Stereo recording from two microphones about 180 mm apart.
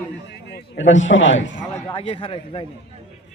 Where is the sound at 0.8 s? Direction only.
90° left.